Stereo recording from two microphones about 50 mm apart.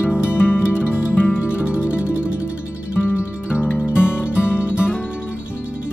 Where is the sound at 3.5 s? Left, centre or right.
Left.